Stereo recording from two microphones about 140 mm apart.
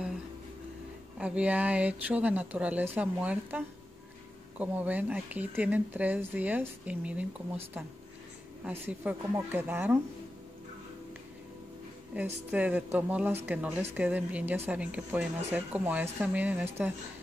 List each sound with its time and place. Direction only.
1.1 s speech: 10° right (ahead or behind)
8.6 s speech: 10° right (ahead or behind)
12.1 s speech: 10° right (ahead or behind)